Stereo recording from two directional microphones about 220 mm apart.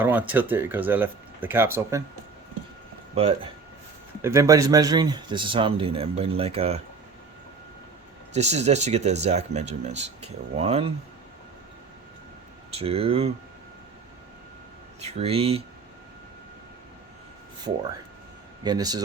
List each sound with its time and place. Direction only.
0.0 s speech: 10° right (ahead or behind)
3.2 s speech: 25° right (ahead or behind)
4.2 s speech: 15° right (ahead or behind); by 6.8 s 30° right (ahead or behind)
8.3 s speech: 30° right (ahead or behind)
12.7 s speech: 25° right (ahead or behind)
15.0 s speech: 25° right (ahead or behind)
18.6 s speech: 20° right (ahead or behind)